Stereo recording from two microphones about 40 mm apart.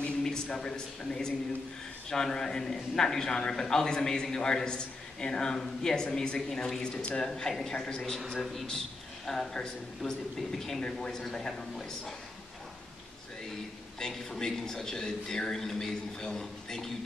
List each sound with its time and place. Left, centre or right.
0.2 s a man's voice: centre
13.9 s a man's voice: centre